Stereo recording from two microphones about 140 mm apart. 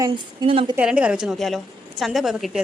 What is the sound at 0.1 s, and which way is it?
Speech, 40° right (ahead or behind).